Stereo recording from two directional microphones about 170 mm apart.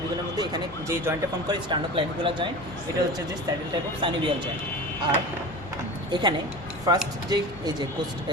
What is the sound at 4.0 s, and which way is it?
Speech, 30° right (ahead or behind).